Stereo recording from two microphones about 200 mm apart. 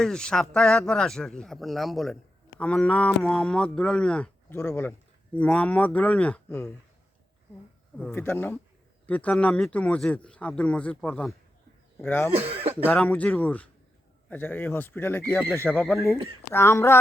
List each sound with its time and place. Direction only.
0.0 s speech: 5° left (ahead or behind)
7.9 s speech: 10° left (ahead or behind)
12.3 s speech: 30° right (ahead or behind)
12.9 s speech: 5° left (ahead or behind)